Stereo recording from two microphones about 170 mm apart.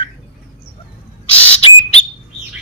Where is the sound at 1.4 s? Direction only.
35° left (ahead or behind).